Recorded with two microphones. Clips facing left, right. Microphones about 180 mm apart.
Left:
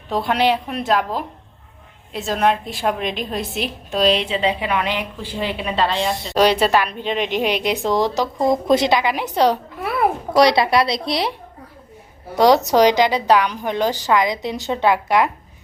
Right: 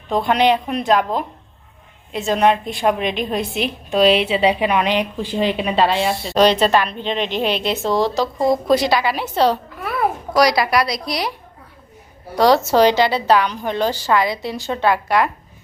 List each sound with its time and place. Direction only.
0.3 s a woman's voice: 5° left (ahead or behind); by 6.1 s 15° right (ahead or behind)
6.1 s a woman's voice: 20° left (ahead or behind)
10.3 s a woman's voice: 25° left (ahead or behind)
12.4 s a woman's voice: 20° left (ahead or behind)